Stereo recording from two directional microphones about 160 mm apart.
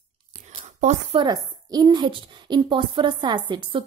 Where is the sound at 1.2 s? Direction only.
25° right (ahead or behind).